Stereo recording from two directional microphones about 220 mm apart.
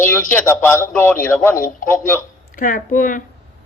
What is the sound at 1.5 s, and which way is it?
Speech, 35° left (ahead or behind).